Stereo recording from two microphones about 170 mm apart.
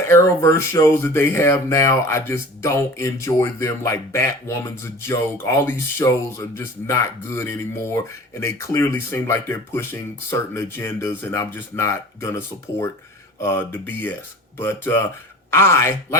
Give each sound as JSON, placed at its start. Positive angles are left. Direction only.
{"t": 0.1, "sound": "speech", "side_deg": 15}
{"t": 13.4, "sound": "speech", "side_deg": 15}